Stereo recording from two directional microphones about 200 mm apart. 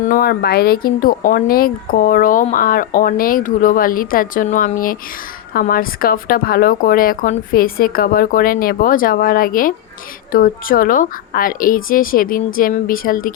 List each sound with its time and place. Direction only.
0.0 s speech: 45° left (ahead or behind)